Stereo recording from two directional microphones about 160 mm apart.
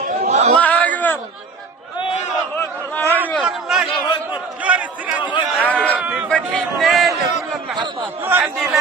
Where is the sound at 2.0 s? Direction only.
40° left (ahead or behind).